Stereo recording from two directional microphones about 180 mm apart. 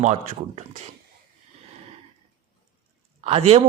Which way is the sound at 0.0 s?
40° right (ahead or behind).